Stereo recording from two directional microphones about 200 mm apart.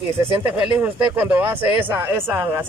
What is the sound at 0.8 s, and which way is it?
Speech, 10° right (ahead or behind).